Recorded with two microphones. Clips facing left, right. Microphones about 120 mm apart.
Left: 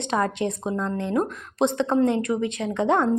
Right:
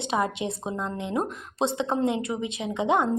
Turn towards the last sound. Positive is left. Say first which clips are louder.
# left 3 dB
turn(degrees=-10)  # may be behind; listen again after turning